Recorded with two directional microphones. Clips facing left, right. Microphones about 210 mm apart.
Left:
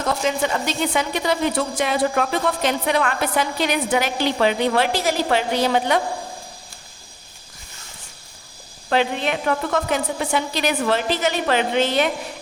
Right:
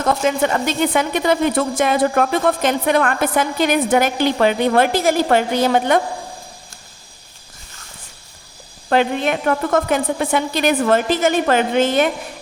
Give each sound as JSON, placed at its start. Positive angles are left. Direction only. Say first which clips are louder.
{"t": 0.0, "sound": "a woman's voice", "louder": "right 4 dB", "side_deg": -55}
{"t": 8.9, "sound": "a woman's voice", "louder": "right 4 dB", "side_deg": -50}